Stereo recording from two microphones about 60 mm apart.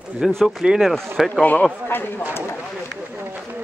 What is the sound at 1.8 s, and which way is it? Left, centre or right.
Speech, left.